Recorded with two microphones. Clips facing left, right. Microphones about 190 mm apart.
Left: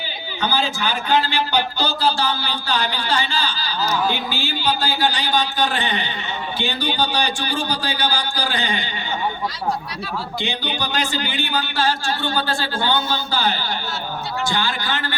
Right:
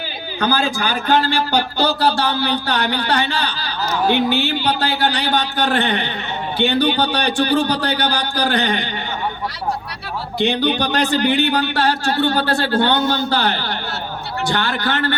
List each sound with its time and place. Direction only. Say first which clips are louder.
0.3 s a man's voice: right 4 dB; 45° right (ahead or behind)
1.8 s speech: right 4 dB; 65° right (ahead or behind)
10.4 s speech: right 12 dB; 65° right (ahead or behind)